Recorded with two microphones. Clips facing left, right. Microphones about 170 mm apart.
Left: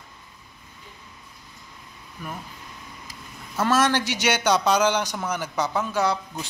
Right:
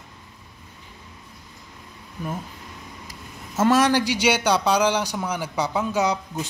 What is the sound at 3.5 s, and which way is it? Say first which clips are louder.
Speech: right 3 dB; 15° right (ahead or behind).